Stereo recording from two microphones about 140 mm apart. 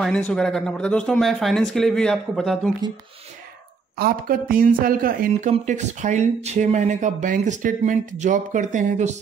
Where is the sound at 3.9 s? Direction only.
90° right.